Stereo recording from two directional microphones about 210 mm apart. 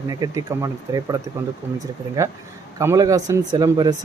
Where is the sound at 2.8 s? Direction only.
15° right (ahead or behind).